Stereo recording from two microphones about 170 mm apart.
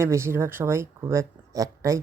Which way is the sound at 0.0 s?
15° right (ahead or behind).